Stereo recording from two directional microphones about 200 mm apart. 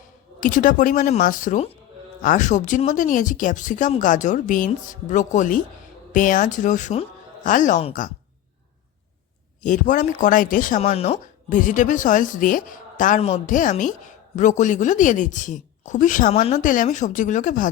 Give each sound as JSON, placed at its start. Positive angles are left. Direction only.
{"t": 0.3, "sound": "speech", "side_deg": 40}
{"t": 9.6, "sound": "speech", "side_deg": 40}